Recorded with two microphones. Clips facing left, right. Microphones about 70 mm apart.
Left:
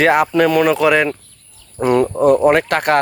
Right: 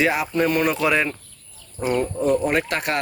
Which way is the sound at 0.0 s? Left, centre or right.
Left.